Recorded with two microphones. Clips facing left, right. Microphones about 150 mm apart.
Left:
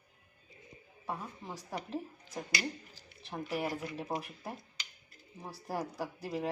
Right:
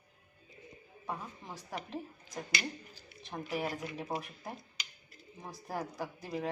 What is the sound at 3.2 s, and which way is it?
Speech, 5° left (ahead or behind).